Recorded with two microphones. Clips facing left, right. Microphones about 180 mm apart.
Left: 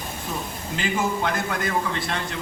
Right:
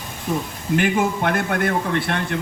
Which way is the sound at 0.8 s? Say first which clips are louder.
Right 4 dB; 60° right (ahead or behind).